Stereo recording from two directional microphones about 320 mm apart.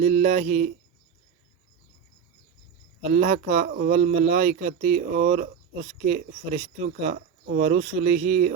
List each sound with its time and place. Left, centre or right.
0.0 s speech: right
3.1 s speech: right